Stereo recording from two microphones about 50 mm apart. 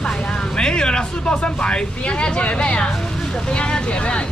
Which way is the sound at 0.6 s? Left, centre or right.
Centre.